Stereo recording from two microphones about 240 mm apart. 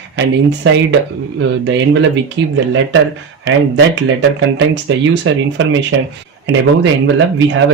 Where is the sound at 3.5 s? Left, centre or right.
Right.